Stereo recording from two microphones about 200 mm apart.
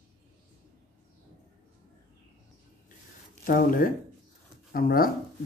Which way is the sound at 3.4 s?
45° left (ahead or behind).